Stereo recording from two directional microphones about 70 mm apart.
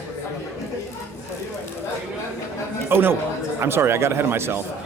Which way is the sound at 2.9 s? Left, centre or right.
Right.